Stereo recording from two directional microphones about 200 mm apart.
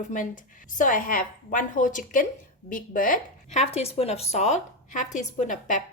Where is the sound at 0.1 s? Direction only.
40° left (ahead or behind).